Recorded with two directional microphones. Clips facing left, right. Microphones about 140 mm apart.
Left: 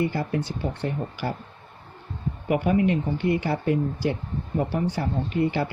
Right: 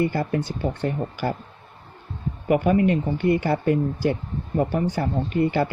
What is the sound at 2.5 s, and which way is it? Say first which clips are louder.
Speech: right 3 dB; 50° right (ahead or behind).